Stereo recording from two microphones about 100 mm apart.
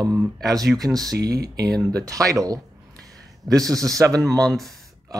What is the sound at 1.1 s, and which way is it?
Speech, 40° right (ahead or behind).